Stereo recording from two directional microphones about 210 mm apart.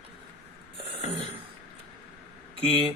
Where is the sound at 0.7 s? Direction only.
25° right (ahead or behind).